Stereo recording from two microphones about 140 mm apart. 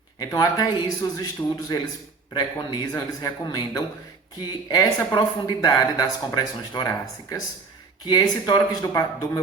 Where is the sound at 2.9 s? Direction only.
25° left (ahead or behind).